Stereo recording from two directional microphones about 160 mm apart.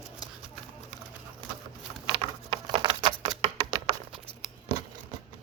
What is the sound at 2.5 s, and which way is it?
Patter, 35° right (ahead or behind).